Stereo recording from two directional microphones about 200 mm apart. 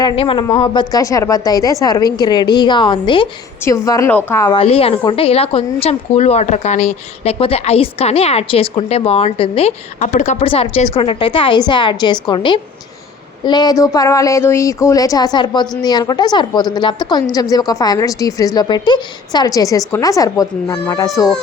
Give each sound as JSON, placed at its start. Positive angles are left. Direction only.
{"t": 0.0, "sound": "a woman's voice", "side_deg": 25}
{"t": 4.5, "sound": "a woman's voice", "side_deg": 30}